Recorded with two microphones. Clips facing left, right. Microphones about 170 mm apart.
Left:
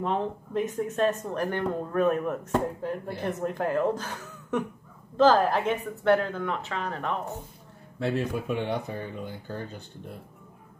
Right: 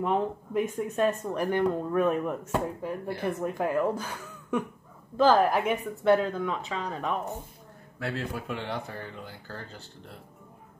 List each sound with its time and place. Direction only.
0.0 s speech: 10° right (ahead or behind)
8.0 s speech: 20° left (ahead or behind)